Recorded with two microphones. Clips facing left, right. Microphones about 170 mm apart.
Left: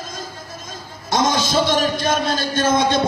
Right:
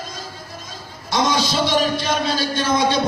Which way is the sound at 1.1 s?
45° left (ahead or behind).